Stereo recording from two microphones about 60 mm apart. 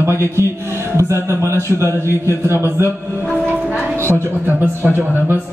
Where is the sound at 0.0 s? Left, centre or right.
Right.